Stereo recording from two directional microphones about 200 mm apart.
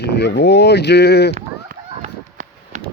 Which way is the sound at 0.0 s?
55° left (ahead or behind).